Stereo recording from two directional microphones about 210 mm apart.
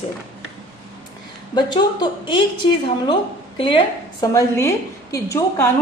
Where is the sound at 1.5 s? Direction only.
20° left (ahead or behind).